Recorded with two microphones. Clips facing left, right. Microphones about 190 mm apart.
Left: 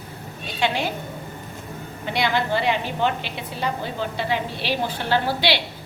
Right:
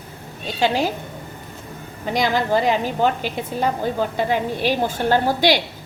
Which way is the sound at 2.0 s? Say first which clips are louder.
Right 3 dB; 40° right (ahead or behind).